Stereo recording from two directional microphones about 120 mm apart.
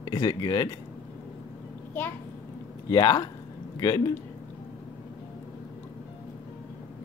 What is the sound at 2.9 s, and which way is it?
Speech, 35° left (ahead or behind).